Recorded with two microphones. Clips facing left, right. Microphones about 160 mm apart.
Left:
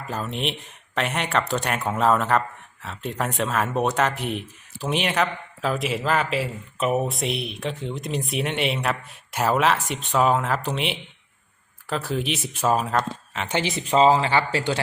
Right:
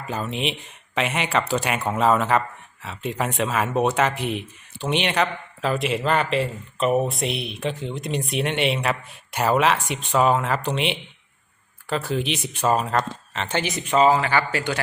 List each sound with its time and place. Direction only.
0.1 s speech: centre (ahead or behind)
13.6 s speech: 25° left (ahead or behind)